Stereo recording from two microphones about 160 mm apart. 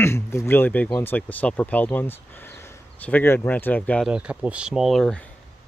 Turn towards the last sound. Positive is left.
turn(degrees=5)  # may be behind; listen again after turning